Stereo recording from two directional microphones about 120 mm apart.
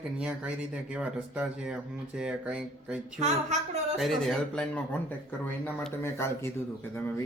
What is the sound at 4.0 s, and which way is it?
Speech, centre (ahead or behind).